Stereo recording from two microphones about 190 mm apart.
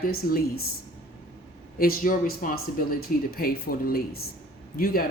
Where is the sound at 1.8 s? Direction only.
50° left (ahead or behind).